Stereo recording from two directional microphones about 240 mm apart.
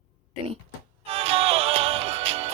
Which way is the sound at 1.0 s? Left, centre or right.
Right.